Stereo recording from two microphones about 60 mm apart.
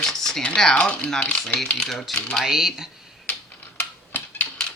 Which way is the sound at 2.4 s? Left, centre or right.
Centre.